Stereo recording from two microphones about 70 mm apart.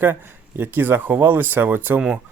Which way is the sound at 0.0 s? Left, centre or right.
Right.